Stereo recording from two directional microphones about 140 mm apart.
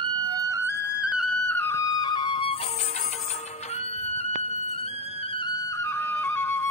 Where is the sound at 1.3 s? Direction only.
10° left (ahead or behind); by 5.5 s 45° left (ahead or behind).